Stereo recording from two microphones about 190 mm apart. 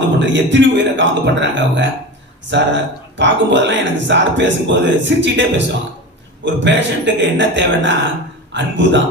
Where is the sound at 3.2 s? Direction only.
70° right (ahead or behind).